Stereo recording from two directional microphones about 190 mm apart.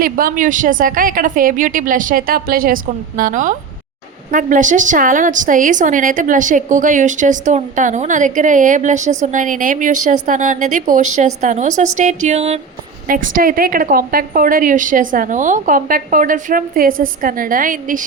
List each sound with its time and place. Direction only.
0.0 s a woman's voice: 50° right (ahead or behind)
11.8 s music: 40° right (ahead or behind)
13.1 s a woman's voice: 45° right (ahead or behind)